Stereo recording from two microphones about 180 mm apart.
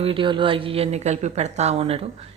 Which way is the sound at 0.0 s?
30° right (ahead or behind).